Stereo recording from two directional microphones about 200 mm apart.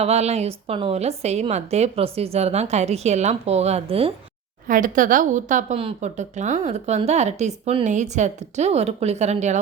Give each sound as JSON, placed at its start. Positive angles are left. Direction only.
{"t": 0.0, "sound": "a woman's voice", "side_deg": -30}
{"t": 4.7, "sound": "a woman's voice", "side_deg": -40}